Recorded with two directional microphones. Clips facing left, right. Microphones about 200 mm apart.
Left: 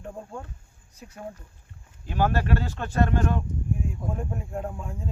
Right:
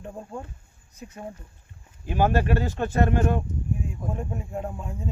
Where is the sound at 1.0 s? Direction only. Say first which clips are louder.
Right 1 dB; 5° right (ahead or behind).